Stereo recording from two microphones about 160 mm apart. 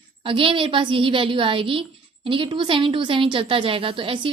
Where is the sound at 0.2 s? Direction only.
35° right (ahead or behind).